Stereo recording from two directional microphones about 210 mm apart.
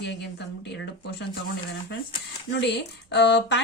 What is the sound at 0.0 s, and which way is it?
Speech, 55° left (ahead or behind).